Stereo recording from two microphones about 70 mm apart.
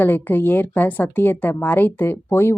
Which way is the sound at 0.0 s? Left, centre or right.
Left.